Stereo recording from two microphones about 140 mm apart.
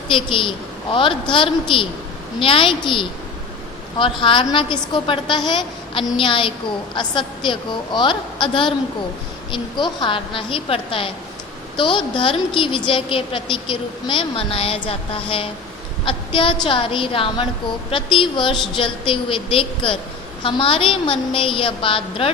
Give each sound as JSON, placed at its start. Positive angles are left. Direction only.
{"t": 0.1, "sound": "a woman's voice", "side_deg": 40}